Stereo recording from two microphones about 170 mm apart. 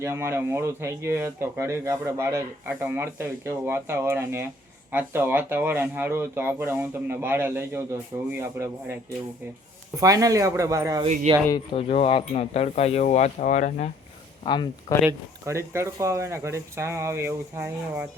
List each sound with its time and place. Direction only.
0.0 s speech: 15° right (ahead or behind)
10.0 s speech: 20° right (ahead or behind)
11.3 s speech: 35° right (ahead or behind)
11.7 s speech: 35° left (ahead or behind)
14.4 s speech: 25° left (ahead or behind)
15.4 s speech: 15° right (ahead or behind)